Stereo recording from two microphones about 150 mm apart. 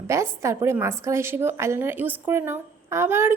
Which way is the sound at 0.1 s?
20° right (ahead or behind).